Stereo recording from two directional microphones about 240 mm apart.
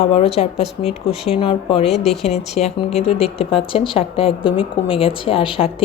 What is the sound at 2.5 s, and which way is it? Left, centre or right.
Speech, left.